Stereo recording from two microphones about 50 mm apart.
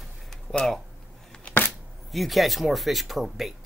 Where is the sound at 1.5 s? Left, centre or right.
Left.